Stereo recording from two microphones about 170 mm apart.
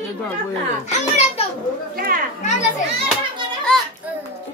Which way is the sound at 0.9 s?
40° left (ahead or behind).